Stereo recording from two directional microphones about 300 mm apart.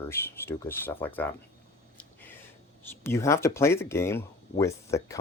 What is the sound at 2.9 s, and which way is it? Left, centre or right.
Speech, centre.